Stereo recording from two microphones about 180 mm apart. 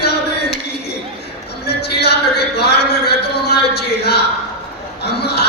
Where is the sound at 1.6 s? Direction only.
65° left (ahead or behind).